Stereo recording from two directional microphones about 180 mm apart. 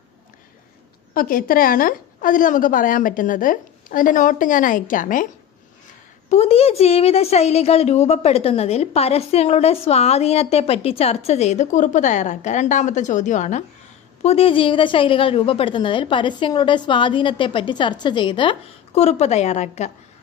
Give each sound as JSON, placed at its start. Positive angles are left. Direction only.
{"t": 1.1, "sound": "a woman's voice", "side_deg": 55}
{"t": 6.2, "sound": "a woman's voice", "side_deg": 35}
{"t": 18.9, "sound": "a woman's voice", "side_deg": 35}